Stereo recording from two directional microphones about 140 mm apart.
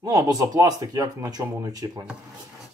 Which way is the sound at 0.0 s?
25° right (ahead or behind).